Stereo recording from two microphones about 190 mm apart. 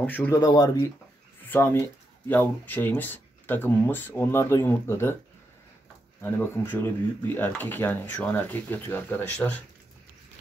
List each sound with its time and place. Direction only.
0.0 s speech: 10° left (ahead or behind)
6.2 s speech: 10° left (ahead or behind)